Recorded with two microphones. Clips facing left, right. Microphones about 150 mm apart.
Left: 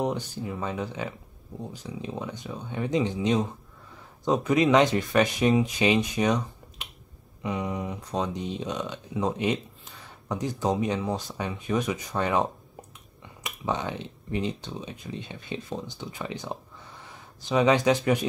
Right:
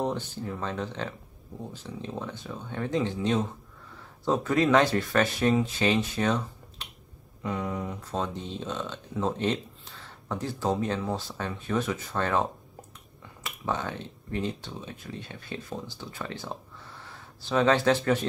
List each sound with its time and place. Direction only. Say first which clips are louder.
0.0 s speech: left 1 dB; 10° left (ahead or behind)